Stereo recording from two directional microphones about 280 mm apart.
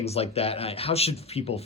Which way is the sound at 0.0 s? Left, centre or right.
Left.